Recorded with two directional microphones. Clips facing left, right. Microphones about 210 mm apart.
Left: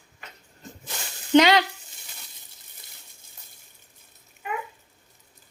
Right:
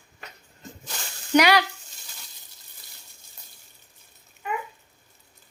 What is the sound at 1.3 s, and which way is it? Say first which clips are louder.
Speech: left 2 dB; 25° left (ahead or behind).